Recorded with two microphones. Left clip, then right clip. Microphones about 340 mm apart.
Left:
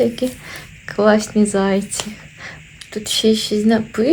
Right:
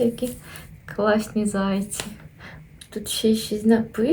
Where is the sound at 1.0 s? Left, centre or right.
Centre.